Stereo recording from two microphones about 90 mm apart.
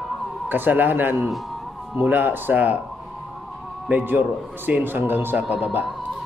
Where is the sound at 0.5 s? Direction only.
20° right (ahead or behind).